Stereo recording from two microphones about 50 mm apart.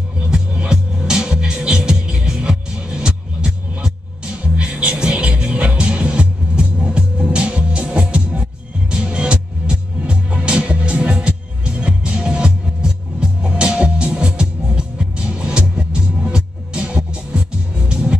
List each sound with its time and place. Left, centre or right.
0.2 s music: right